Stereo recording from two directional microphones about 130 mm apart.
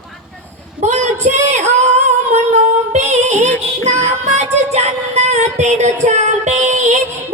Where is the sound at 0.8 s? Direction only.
60° right (ahead or behind).